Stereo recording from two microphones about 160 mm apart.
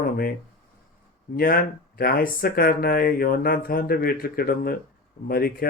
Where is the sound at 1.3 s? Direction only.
65° left (ahead or behind).